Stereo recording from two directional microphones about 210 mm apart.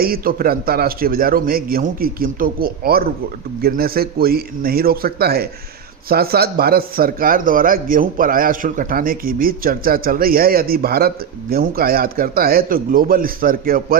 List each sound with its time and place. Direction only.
0.0 s a man's voice: 45° right (ahead or behind)